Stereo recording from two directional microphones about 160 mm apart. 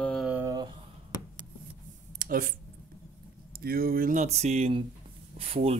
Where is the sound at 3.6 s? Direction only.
70° right (ahead or behind); by 5.7 s 35° right (ahead or behind).